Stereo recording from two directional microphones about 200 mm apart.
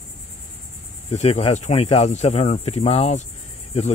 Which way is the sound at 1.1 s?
30° left (ahead or behind).